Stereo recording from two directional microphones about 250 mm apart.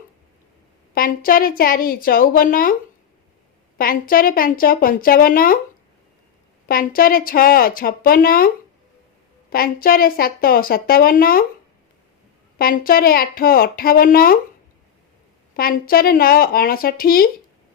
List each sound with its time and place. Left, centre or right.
0.9 s a woman's voice: left
3.8 s a woman's voice: left
6.7 s a woman's voice: left
9.5 s a woman's voice: left
12.5 s a woman's voice: left
15.5 s a woman's voice: left